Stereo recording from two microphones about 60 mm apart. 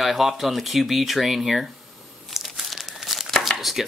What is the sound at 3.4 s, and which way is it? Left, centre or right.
Chopping, centre.